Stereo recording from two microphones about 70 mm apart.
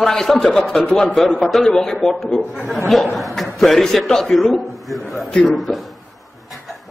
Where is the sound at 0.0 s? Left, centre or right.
Centre.